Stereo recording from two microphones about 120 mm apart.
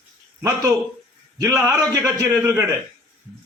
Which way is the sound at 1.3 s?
25° right (ahead or behind).